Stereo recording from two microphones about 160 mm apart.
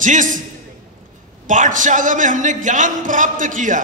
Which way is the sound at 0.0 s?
55° right (ahead or behind).